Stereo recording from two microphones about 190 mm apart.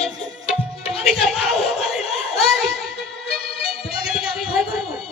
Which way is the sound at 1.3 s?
30° left (ahead or behind).